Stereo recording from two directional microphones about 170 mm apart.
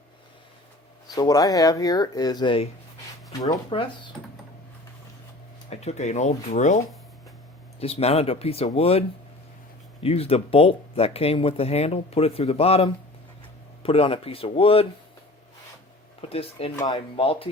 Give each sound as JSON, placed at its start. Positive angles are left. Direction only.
{"t": 1.1, "sound": "speech", "side_deg": 20}
{"t": 5.7, "sound": "speech", "side_deg": 40}
{"t": 16.3, "sound": "speech", "side_deg": 35}
{"t": 16.7, "sound": "speech", "side_deg": 25}